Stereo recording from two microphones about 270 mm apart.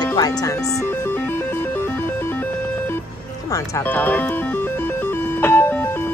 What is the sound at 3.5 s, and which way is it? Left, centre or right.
Music, centre.